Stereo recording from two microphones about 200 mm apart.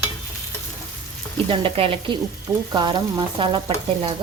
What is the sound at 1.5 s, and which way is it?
Stir, 25° right (ahead or behind).